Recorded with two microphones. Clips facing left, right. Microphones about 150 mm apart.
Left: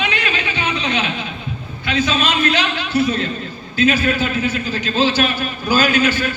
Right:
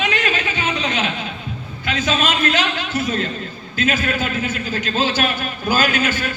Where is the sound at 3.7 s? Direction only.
50° right (ahead or behind).